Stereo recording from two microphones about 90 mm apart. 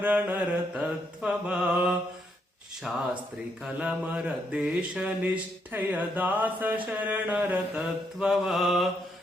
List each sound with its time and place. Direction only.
0.0 s mantra: 15° right (ahead or behind)
7.8 s mantra: 5° right (ahead or behind)